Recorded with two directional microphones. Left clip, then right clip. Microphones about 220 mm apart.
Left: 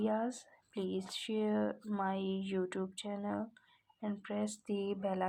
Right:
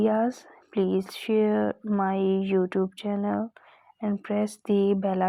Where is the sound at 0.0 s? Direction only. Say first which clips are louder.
Right 12 dB; 35° right (ahead or behind).